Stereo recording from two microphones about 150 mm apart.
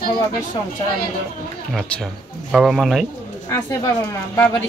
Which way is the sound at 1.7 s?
5° left (ahead or behind).